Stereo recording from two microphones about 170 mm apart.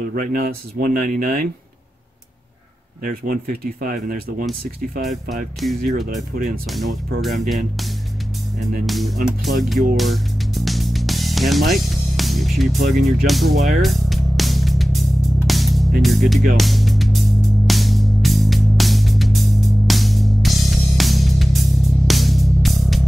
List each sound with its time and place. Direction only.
0.1 s speech: 55° right (ahead or behind)
3.0 s speech: 55° right (ahead or behind)
5.6 s speech: centre (ahead or behind)
6.0 s speech: 60° right (ahead or behind)
6.7 s speech: centre (ahead or behind)
8.8 s speech: centre (ahead or behind)
9.6 s music: centre (ahead or behind)
12.2 s speech: centre (ahead or behind)
13.7 s music: centre (ahead or behind)